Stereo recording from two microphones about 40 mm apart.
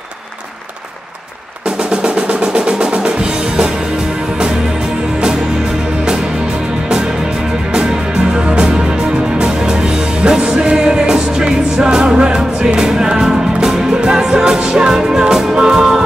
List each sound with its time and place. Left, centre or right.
2.1 s music: right
7.7 s music: right
10.2 s music: centre